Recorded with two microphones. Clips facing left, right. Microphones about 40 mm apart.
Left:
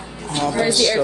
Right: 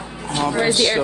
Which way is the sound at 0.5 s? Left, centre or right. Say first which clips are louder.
Even; right.